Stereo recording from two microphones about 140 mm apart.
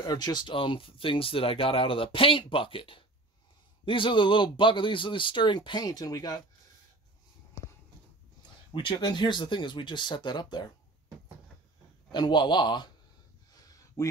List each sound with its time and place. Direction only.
0.0 s speech: 30° left (ahead or behind)
8.4 s speech: 35° left (ahead or behind)
12.1 s speech: 30° left (ahead or behind)
13.7 s a sound: 25° left (ahead or behind)